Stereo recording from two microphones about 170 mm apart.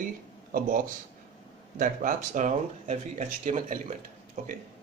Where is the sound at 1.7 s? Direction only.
50° right (ahead or behind).